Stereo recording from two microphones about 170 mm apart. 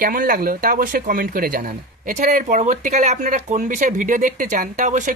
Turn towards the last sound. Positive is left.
turn(degrees=-45)  # may be behind; listen again after turning